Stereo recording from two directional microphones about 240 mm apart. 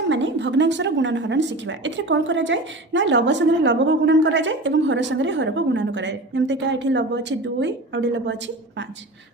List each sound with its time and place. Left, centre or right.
0.1 s a woman's voice: right